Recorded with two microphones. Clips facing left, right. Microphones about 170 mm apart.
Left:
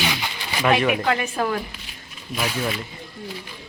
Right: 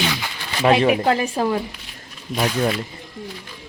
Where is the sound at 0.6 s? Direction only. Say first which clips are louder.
Right 4 dB; 30° right (ahead or behind).